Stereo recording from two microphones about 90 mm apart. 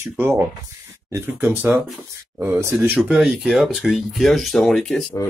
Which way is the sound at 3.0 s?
Centre (ahead or behind).